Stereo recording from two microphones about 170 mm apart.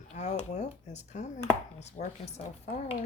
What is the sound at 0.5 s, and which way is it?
Speech, 40° left (ahead or behind).